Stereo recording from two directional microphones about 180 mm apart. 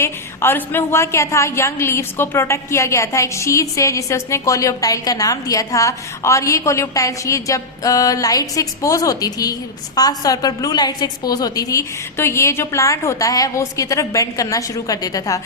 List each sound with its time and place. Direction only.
0.0 s a woman's voice: 10° left (ahead or behind)